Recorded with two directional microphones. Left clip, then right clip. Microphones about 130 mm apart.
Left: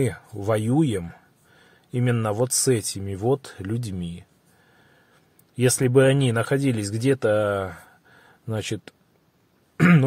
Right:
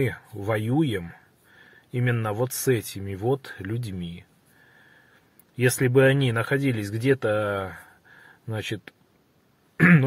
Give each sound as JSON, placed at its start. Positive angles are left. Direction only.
{"t": 0.4, "sound": "speech", "side_deg": 40}
{"t": 5.6, "sound": "speech", "side_deg": 35}
{"t": 9.8, "sound": "cough", "side_deg": 40}